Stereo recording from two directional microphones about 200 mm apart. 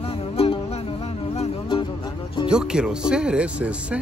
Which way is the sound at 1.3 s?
30° left (ahead or behind).